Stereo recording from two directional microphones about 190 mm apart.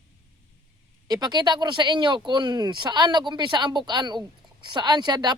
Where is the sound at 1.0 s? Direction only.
20° right (ahead or behind).